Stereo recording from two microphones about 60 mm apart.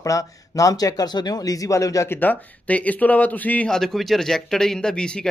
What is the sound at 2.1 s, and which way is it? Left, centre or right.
Speech, left.